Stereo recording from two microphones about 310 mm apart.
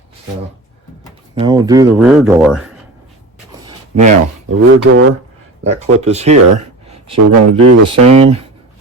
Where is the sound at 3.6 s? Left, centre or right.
Centre.